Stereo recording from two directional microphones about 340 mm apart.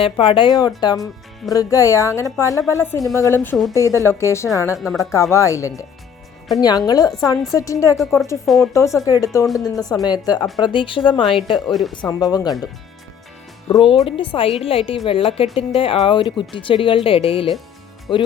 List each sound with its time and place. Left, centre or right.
0.0 s a woman's voice: centre
11.7 s speech: centre
11.9 s a woman's voice: centre
13.7 s a woman's voice: centre